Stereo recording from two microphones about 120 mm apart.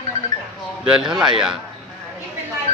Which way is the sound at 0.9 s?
5° right (ahead or behind).